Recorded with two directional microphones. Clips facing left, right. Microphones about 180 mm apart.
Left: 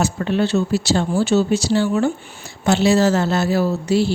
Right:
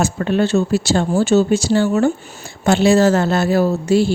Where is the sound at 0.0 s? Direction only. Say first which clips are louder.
Right 2 dB; 50° right (ahead or behind).